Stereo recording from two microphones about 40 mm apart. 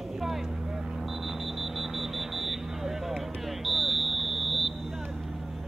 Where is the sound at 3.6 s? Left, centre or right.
Centre.